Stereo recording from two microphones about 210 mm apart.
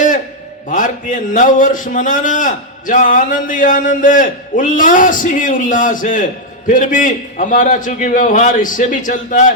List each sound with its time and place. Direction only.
0.7 s a man's voice: 40° left (ahead or behind)